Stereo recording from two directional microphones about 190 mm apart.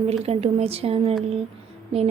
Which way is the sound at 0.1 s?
35° right (ahead or behind).